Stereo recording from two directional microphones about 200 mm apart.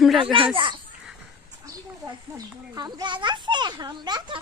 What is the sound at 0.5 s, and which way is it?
Children playing, 25° right (ahead or behind).